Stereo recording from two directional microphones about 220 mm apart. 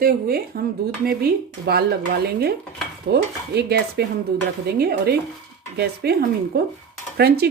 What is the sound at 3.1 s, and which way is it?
Speech, 45° right (ahead or behind).